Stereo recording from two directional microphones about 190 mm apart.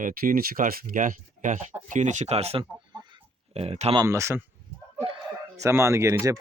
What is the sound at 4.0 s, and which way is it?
Speech, 15° right (ahead or behind).